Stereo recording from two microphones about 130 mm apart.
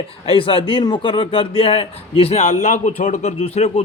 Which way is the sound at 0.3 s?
45° left (ahead or behind).